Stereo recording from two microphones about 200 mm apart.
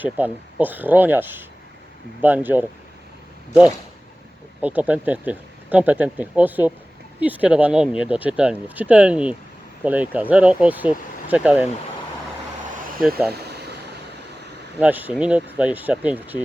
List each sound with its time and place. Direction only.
0.0 s speech: 10° right (ahead or behind)
4.6 s speech: 5° right (ahead or behind)
13.3 s a sound: 55° right (ahead or behind)
14.8 s speech: 10° right (ahead or behind)